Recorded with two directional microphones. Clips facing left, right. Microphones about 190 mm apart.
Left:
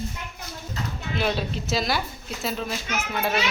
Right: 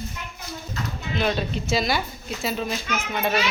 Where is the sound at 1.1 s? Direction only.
5° left (ahead or behind).